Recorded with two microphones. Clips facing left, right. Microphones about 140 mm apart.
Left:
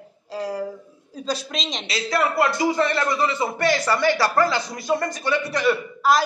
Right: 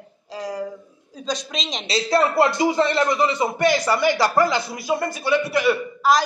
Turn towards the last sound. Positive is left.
turn(degrees=-10)  # may be behind; listen again after turning